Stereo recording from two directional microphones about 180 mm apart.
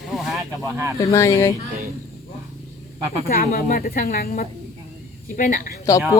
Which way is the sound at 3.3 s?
55° left (ahead or behind).